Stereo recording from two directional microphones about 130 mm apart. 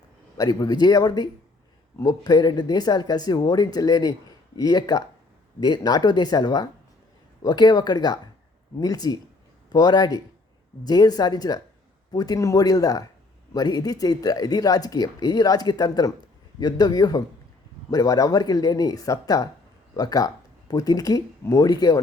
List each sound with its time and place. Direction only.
0.3 s speech: 30° left (ahead or behind)